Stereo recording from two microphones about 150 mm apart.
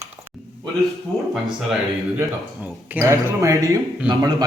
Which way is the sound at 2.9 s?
15° right (ahead or behind).